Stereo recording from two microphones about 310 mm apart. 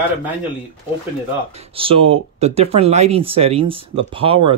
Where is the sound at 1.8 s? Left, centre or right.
Centre.